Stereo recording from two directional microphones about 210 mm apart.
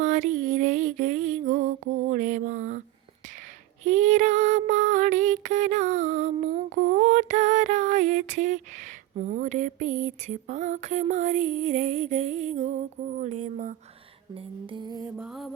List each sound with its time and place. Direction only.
0.0 s female singing: 35° right (ahead or behind)
3.8 s female singing: 35° right (ahead or behind)
14.3 s music: 25° right (ahead or behind)
15.1 s music: 5° right (ahead or behind)